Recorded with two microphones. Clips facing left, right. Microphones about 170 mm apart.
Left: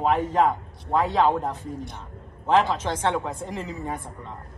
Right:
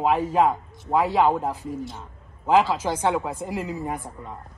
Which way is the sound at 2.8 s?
10° right (ahead or behind).